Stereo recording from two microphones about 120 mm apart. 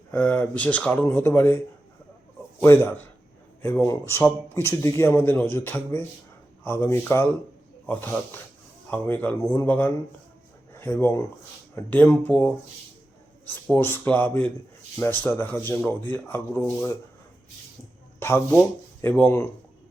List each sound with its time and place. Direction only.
0.1 s speech: 15° left (ahead or behind)
2.6 s a man's voice: 20° left (ahead or behind)
9.4 s a man's voice: 30° left (ahead or behind)
9.6 s speech: 15° left (ahead or behind)
13.7 s speech: 20° left (ahead or behind)
18.2 s a man's voice: 20° left (ahead or behind)